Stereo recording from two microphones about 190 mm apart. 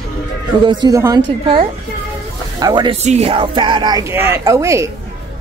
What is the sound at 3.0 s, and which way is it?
A woman's voice, 35° right (ahead or behind).